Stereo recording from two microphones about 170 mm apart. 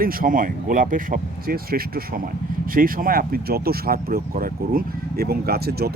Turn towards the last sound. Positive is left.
turn(degrees=-70)  # may be behind; listen again after turning